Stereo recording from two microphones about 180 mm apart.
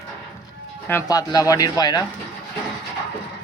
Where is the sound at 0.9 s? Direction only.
15° left (ahead or behind).